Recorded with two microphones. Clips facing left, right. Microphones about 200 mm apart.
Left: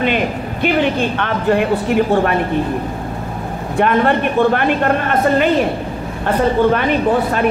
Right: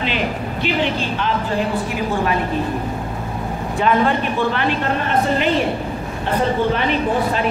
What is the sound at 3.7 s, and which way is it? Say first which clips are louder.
Speech: left 3 dB; 60° left (ahead or behind).